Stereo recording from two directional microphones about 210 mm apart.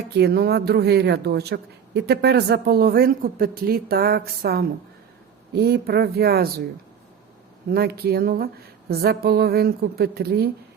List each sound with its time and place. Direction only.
0.1 s speech: 50° right (ahead or behind)
7.7 s speech: 50° right (ahead or behind)